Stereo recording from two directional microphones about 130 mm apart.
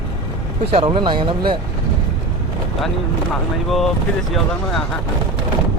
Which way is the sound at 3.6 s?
Centre (ahead or behind).